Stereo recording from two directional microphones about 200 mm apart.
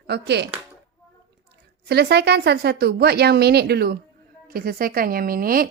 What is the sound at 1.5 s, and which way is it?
A woman's voice, 55° right (ahead or behind).